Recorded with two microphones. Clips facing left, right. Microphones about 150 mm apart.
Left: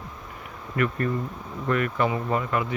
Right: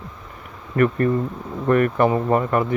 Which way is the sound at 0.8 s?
40° right (ahead or behind).